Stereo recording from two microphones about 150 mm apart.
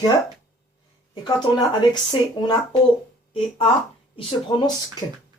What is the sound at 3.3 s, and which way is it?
Speech, 40° left (ahead or behind).